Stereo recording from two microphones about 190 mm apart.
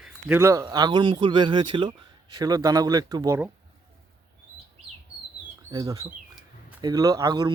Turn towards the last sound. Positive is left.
turn(degrees=-20)  # may be behind; listen again after turning